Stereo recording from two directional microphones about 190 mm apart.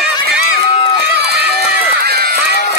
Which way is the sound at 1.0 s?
60° right (ahead or behind).